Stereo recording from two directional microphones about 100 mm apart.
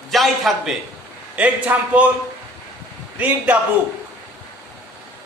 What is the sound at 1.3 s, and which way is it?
Speech, 15° right (ahead or behind).